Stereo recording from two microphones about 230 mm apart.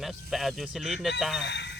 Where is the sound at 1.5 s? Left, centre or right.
Left.